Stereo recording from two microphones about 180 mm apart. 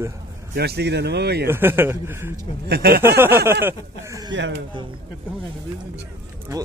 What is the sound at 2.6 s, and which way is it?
Speech, 60° right (ahead or behind).